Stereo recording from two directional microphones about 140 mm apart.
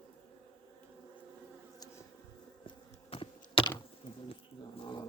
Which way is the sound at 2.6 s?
40° left (ahead or behind).